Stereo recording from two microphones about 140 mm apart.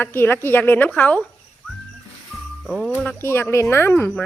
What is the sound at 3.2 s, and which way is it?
A woman's voice, 15° left (ahead or behind).